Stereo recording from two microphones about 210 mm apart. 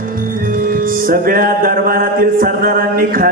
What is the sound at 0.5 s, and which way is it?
Music, 40° right (ahead or behind).